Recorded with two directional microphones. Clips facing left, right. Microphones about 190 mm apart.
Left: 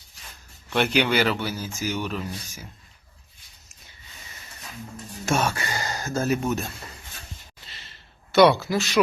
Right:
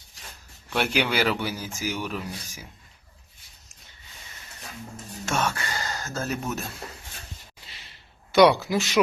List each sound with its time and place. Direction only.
0.7 s speech: 5° right (ahead or behind)
5.2 s speech: 10° left (ahead or behind)
8.3 s speech: 10° right (ahead or behind)